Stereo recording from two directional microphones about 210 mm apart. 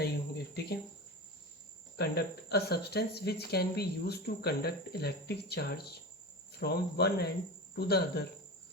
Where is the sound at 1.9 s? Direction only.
50° left (ahead or behind).